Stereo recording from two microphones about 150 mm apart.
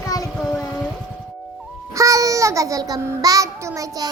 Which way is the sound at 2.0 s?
20° right (ahead or behind).